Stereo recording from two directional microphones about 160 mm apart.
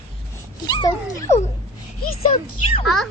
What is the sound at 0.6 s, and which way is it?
Speech, 25° left (ahead or behind).